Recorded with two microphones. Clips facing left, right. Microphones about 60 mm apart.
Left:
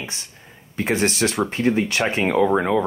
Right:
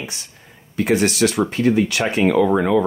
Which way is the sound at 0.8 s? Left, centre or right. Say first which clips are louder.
Right 4 dB; left.